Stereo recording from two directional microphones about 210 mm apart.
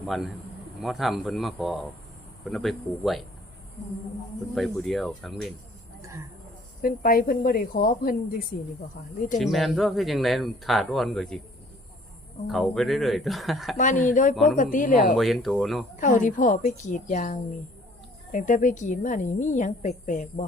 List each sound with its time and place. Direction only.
0.0 s speech: centre (ahead or behind)
4.5 s speech: centre (ahead or behind)
6.0 s a sound: 15° right (ahead or behind)
6.8 s speech: 45° left (ahead or behind)
9.4 s speech: centre (ahead or behind)
12.5 s speech: centre (ahead or behind)
13.7 s a woman's voice: 35° left (ahead or behind)
15.1 s speech: centre (ahead or behind)
16.0 s a woman's voice: 40° left (ahead or behind)